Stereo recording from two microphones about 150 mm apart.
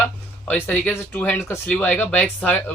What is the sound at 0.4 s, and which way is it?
Speech, 10° left (ahead or behind).